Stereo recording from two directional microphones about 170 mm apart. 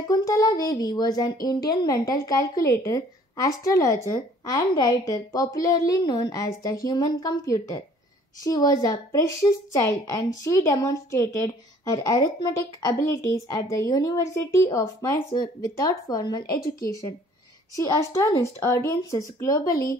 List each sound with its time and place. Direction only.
0.1 s speech: 20° left (ahead or behind)